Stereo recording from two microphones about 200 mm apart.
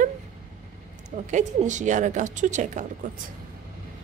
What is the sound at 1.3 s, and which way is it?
A woman's voice, 40° right (ahead or behind).